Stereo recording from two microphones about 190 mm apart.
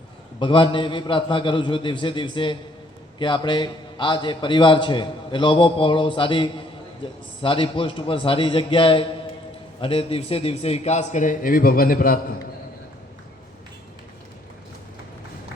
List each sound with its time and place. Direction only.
0.3 s a man's voice: 25° left (ahead or behind); by 12.4 s 50° left (ahead or behind)